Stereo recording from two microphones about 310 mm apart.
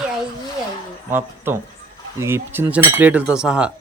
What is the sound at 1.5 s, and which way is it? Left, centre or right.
Speech, centre.